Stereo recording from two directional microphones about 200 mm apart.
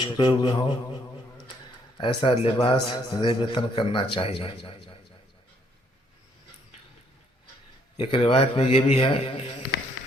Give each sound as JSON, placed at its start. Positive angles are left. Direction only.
{"t": 0.0, "sound": "a man's voice", "side_deg": 20}
{"t": 2.0, "sound": "a man's voice", "side_deg": 30}
{"t": 7.9, "sound": "a man's voice", "side_deg": 30}